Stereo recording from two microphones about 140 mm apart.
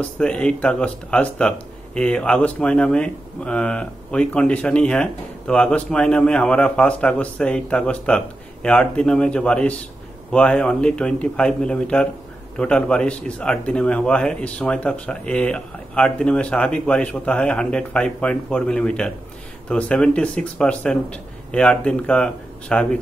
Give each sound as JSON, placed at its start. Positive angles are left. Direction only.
{"t": 0.2, "sound": "speech", "side_deg": 5}